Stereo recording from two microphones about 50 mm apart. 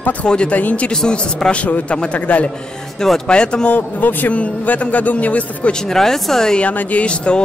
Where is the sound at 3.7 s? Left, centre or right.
Left.